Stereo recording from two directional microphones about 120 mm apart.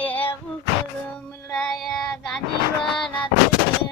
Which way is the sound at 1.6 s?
5° left (ahead or behind).